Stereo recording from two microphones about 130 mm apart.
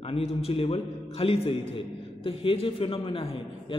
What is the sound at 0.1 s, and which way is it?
A man's voice, 50° left (ahead or behind).